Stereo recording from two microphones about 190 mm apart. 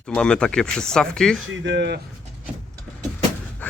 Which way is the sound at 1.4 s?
70° right (ahead or behind).